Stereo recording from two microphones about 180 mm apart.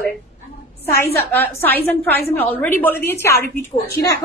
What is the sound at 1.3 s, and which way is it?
A woman's voice, 10° left (ahead or behind).